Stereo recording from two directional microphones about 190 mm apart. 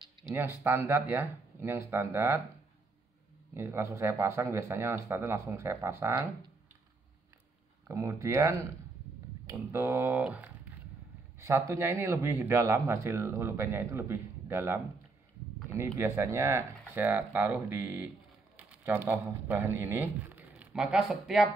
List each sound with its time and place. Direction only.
0.2 s speech: 5° right (ahead or behind)
3.5 s speech: 15° right (ahead or behind)
7.9 s speech: 15° right (ahead or behind)
9.6 s speech: 15° right (ahead or behind)